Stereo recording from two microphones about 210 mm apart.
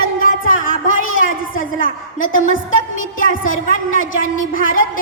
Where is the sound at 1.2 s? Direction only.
40° left (ahead or behind).